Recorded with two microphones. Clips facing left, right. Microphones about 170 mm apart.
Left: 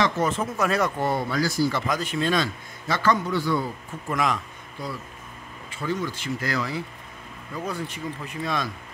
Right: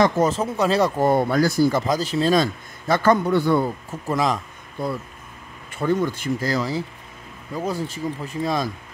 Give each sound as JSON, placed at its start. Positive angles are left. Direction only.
{"t": 0.0, "sound": "speech", "side_deg": -40}
{"t": 4.1, "sound": "speech", "side_deg": -35}
{"t": 4.8, "sound": "speech", "side_deg": -55}
{"t": 6.4, "sound": "speech", "side_deg": -35}